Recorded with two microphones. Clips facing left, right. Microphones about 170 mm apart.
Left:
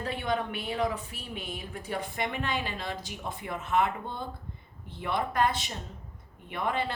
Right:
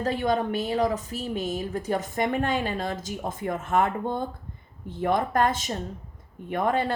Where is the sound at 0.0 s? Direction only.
40° right (ahead or behind).